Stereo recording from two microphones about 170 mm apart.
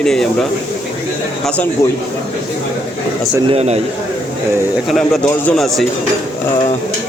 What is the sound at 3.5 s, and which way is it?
Speech, 35° right (ahead or behind).